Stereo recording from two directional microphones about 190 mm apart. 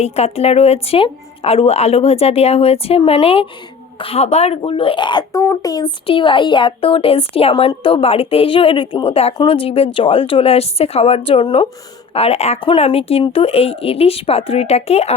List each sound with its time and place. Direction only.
0.0 s a woman's voice: 35° left (ahead or behind)